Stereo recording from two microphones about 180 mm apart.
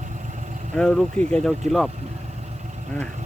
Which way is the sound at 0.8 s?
5° left (ahead or behind).